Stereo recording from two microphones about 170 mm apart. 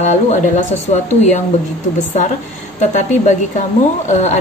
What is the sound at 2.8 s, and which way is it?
A woman's voice, 45° left (ahead or behind).